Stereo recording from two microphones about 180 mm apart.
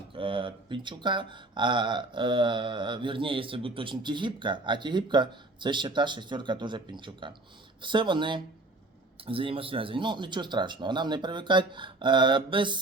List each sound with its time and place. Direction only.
0.1 s speech: 30° right (ahead or behind)